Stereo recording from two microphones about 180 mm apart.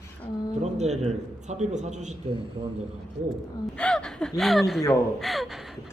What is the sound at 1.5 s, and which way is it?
Speech, 40° right (ahead or behind).